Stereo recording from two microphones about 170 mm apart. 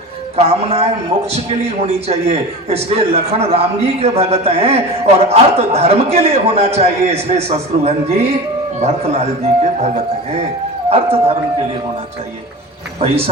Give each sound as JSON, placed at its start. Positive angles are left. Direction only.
{"t": 0.3, "sound": "a man's voice", "side_deg": -40}
{"t": 13.0, "sound": "a man's voice", "side_deg": -35}